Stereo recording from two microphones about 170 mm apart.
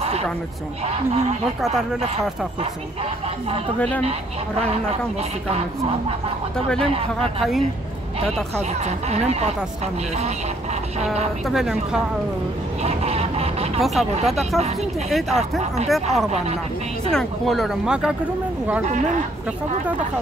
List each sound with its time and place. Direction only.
0.8 s speech: 35° right (ahead or behind)
6.8 s speech: 35° right (ahead or behind)
8.3 s speech: centre (ahead or behind)
8.8 s speech: 40° right (ahead or behind)
11.4 s speech: centre (ahead or behind)
12.8 s a sound: 35° right (ahead or behind)
13.7 s speech: centre (ahead or behind)